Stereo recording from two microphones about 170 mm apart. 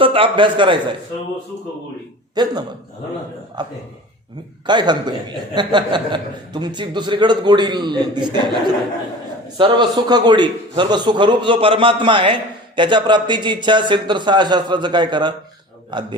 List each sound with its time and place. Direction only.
0.0 s a man's voice: 30° right (ahead or behind)
2.3 s a man's voice: 25° right (ahead or behind)
9.6 s a man's voice: 25° right (ahead or behind)